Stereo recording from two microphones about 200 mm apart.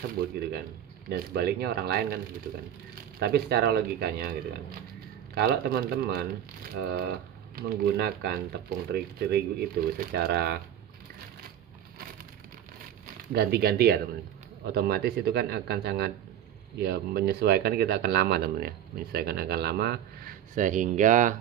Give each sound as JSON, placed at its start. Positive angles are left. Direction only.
{"t": 0.2, "sound": "speech", "side_deg": -50}
{"t": 3.2, "sound": "speech", "side_deg": -50}
{"t": 13.3, "sound": "speech", "side_deg": -50}